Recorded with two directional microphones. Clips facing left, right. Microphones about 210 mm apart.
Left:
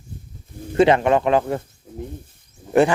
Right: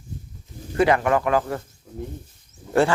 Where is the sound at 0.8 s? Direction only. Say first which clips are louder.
Left 4 dB; 25° left (ahead or behind).